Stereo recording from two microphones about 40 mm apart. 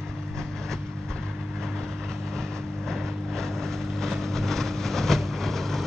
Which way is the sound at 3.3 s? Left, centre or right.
Centre.